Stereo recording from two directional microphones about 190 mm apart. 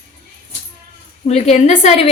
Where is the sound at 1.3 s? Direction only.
35° left (ahead or behind).